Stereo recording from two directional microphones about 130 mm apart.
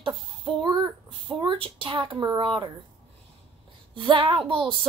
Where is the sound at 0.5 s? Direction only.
35° right (ahead or behind).